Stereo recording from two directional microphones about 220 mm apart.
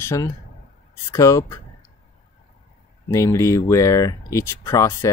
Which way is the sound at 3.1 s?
15° left (ahead or behind).